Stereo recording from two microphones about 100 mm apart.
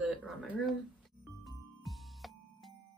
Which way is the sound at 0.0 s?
15° right (ahead or behind).